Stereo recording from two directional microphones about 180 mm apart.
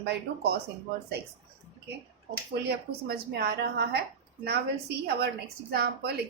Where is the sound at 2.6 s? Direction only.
60° right (ahead or behind).